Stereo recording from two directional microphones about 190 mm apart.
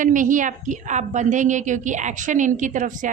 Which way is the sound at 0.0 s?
45° right (ahead or behind).